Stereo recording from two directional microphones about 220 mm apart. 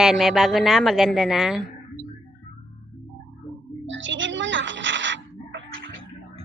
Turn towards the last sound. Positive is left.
turn(degrees=-55)  # may be behind; listen again after turning